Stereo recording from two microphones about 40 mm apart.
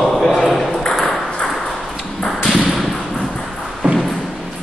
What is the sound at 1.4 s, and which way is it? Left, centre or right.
Ping, centre.